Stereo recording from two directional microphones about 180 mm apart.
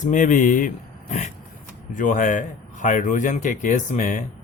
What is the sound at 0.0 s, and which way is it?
Speech, 45° left (ahead or behind).